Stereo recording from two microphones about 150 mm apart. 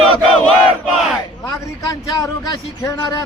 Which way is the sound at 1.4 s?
20° left (ahead or behind).